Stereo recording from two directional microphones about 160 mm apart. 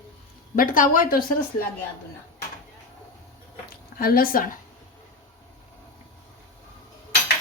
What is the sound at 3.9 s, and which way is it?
Speech, 70° left (ahead or behind).